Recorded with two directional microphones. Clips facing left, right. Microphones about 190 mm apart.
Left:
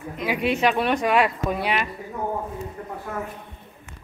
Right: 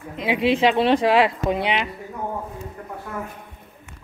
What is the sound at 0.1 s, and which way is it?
Speech, 25° right (ahead or behind).